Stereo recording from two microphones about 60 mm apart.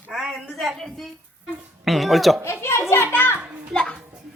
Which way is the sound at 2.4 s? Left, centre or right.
Left.